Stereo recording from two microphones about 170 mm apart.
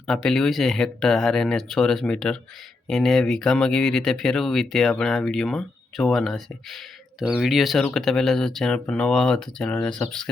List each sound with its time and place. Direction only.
0.1 s speech: centre (ahead or behind)